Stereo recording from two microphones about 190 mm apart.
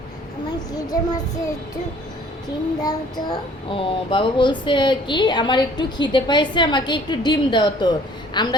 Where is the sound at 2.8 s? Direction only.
20° left (ahead or behind).